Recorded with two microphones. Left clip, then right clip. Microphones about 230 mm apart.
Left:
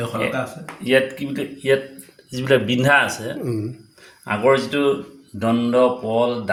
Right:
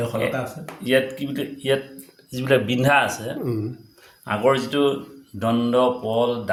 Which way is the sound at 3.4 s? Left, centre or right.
Centre.